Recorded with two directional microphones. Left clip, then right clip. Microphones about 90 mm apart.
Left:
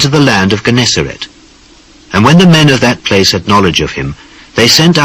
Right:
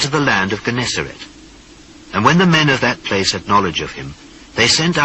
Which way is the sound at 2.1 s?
45° left (ahead or behind).